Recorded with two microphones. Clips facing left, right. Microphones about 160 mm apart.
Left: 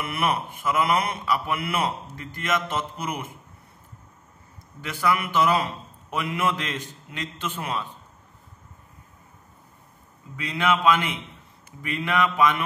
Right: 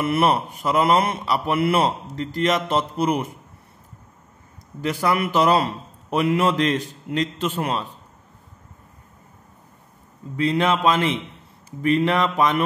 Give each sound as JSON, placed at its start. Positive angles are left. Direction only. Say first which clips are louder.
{"t": 0.0, "sound": "speech", "louder": "right 7 dB", "side_deg": -35}
{"t": 5.0, "sound": "speech", "louder": "right 3 dB", "side_deg": -35}
{"t": 10.3, "sound": "speech", "louder": "right 5 dB", "side_deg": -30}